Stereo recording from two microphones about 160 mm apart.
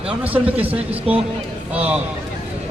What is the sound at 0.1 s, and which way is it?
Speech, 10° right (ahead or behind).